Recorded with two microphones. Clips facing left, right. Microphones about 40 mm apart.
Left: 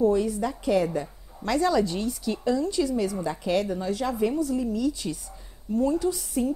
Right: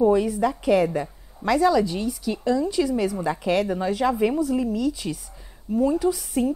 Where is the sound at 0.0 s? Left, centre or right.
Centre.